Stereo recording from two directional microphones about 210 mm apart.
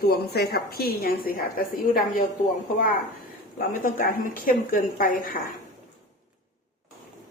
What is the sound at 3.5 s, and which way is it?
A woman's voice, 40° left (ahead or behind).